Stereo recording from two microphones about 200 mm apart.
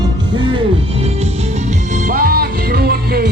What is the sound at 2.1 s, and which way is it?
Music, 45° right (ahead or behind).